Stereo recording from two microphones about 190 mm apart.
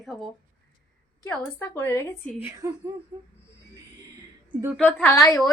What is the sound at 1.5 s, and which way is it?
Speech, 15° left (ahead or behind).